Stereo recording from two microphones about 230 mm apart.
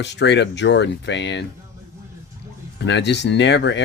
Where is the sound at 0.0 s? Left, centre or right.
Left.